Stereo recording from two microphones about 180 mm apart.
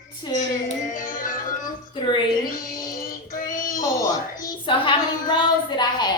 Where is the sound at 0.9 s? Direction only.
45° left (ahead or behind).